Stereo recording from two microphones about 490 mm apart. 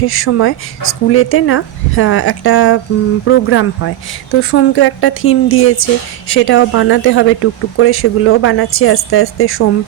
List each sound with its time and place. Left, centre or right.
0.0 s speech: left